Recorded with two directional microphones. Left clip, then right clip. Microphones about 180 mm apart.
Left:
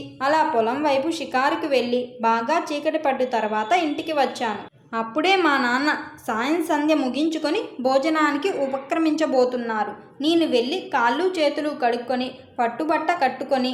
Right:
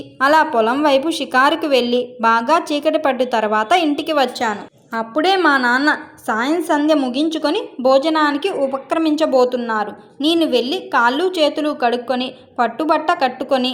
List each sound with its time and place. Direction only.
0.2 s a woman's voice: 40° right (ahead or behind)
4.4 s a woman's voice: 20° right (ahead or behind)